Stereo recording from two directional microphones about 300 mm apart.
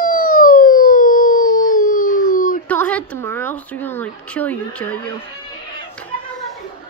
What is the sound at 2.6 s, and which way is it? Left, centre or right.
A woman's voice, centre.